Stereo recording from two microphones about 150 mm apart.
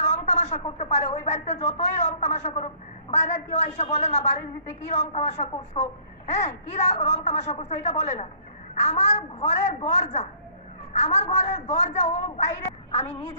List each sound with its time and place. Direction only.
0.0 s a woman's voice: 45° left (ahead or behind)
13.1 s a woman's voice: 15° left (ahead or behind)